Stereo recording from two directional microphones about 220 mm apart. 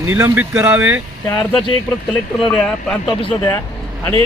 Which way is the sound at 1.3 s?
5° left (ahead or behind).